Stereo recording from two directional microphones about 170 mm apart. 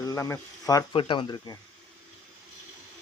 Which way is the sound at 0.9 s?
30° left (ahead or behind).